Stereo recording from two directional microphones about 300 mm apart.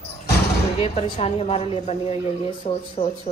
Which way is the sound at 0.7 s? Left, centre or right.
Centre.